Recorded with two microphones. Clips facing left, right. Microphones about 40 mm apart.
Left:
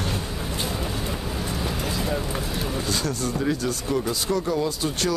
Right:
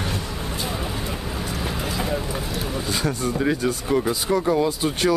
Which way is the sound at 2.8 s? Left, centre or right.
Centre.